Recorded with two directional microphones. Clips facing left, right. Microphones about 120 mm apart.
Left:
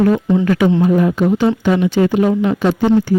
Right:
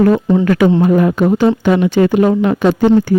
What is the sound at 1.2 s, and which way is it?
Speech, 40° right (ahead or behind).